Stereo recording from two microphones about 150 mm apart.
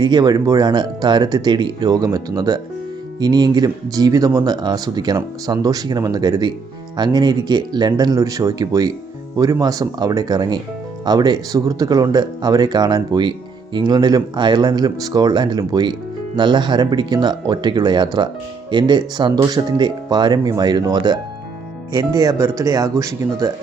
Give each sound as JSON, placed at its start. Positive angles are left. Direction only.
{"t": 0.0, "sound": "speech", "side_deg": -30}